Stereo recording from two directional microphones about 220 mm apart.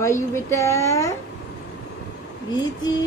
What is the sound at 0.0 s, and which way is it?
A woman's voice, 10° left (ahead or behind).